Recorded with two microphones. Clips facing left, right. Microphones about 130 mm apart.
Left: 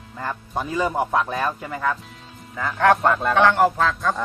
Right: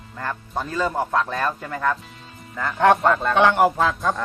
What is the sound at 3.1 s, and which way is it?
Speech, 10° left (ahead or behind).